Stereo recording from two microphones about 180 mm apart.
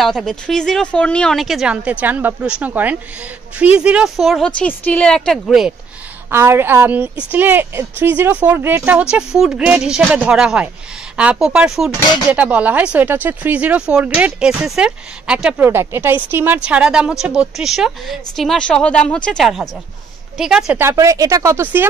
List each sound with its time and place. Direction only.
0.0 s speech: centre (ahead or behind)
6.3 s a woman's voice: 15° right (ahead or behind)
20.8 s a woman's voice: 15° right (ahead or behind)